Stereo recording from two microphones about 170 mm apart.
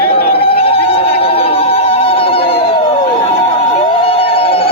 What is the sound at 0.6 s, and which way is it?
Emergency vehicle, 35° left (ahead or behind).